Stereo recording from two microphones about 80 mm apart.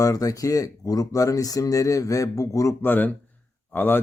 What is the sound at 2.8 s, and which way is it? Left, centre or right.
Speech, left.